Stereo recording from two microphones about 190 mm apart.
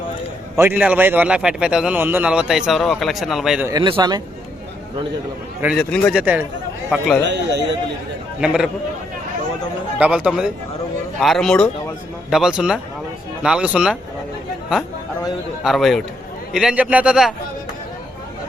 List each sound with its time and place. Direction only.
0.6 s a man's voice: 10° right (ahead or behind)
3.7 s a man's voice: 25° right (ahead or behind)
5.6 s a man's voice: 5° left (ahead or behind)
7.3 s speech: 65° right (ahead or behind)
8.4 s a man's voice: 5° right (ahead or behind)
10.0 s a man's voice: 5° right (ahead or behind)